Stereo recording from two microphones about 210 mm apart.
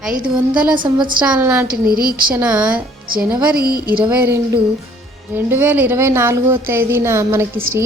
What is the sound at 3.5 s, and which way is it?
Speech, 45° right (ahead or behind).